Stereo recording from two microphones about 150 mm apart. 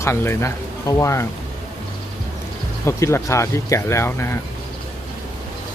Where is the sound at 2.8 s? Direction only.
20° left (ahead or behind).